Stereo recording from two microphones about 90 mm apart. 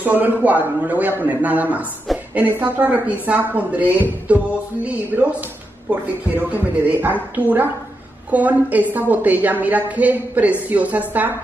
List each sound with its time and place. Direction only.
0.0 s a man's voice: 20° right (ahead or behind)